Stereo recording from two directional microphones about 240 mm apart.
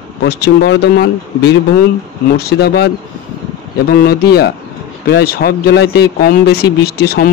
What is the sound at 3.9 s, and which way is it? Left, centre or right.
A man's voice, left.